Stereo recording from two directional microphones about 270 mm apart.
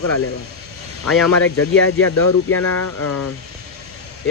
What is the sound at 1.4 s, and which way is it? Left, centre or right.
Speech, left.